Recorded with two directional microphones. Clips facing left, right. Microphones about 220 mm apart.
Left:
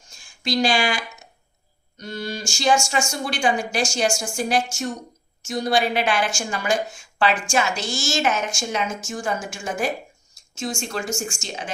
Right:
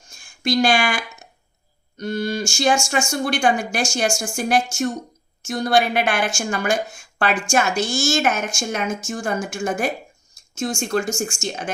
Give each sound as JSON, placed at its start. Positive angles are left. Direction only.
{"t": 0.4, "sound": "a woman's voice", "side_deg": -55}
{"t": 2.0, "sound": "a sound", "side_deg": -55}
{"t": 2.5, "sound": "a woman's voice", "side_deg": -50}